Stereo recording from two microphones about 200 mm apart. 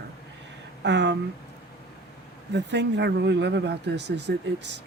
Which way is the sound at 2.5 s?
60° right (ahead or behind).